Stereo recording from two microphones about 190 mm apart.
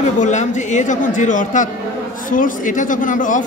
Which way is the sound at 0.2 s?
40° left (ahead or behind).